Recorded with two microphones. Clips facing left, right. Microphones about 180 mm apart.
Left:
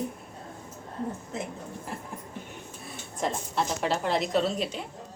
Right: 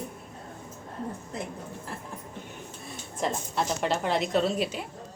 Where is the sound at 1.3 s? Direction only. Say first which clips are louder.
Even; centre (ahead or behind).